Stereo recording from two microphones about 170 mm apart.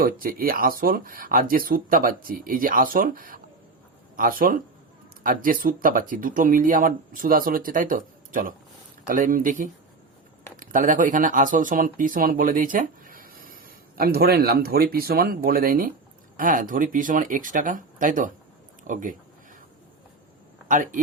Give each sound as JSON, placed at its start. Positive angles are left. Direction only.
{"t": 0.0, "sound": "speech", "side_deg": -55}
{"t": 20.7, "sound": "speech", "side_deg": -50}